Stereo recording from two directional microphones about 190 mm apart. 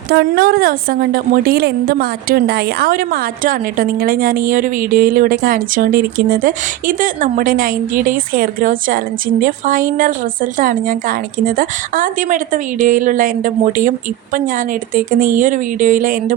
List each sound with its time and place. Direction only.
0.1 s a woman's voice: 55° right (ahead or behind)